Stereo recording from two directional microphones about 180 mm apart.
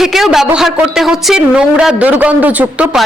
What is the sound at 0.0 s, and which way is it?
Speech, centre (ahead or behind).